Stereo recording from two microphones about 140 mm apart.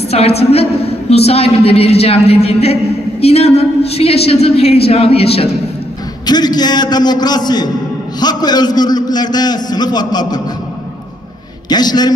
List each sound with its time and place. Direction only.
0.1 s a woman's voice: 45° left (ahead or behind)
6.2 s a man's voice: 30° left (ahead or behind)
11.7 s a man's voice: 30° left (ahead or behind)